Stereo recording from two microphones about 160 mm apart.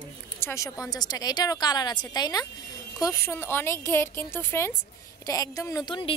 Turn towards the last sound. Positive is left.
turn(degrees=30)  # may be behind; listen again after turning